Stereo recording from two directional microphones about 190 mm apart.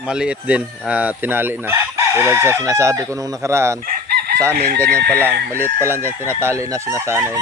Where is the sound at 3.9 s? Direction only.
55° right (ahead or behind).